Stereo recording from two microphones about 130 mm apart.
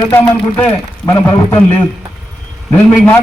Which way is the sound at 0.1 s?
15° left (ahead or behind).